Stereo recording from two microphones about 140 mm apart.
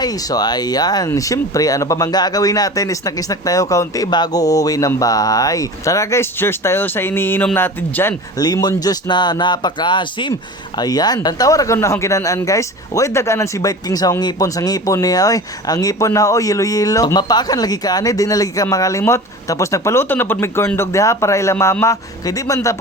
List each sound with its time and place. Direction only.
0.0 s speech: 25° left (ahead or behind)
8.4 s speech: 30° left (ahead or behind)